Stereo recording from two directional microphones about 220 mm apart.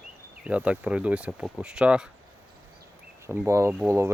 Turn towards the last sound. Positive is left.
turn(degrees=-10)  # may be behind; listen again after turning